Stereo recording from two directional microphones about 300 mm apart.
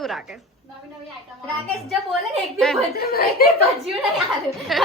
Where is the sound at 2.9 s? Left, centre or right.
Left.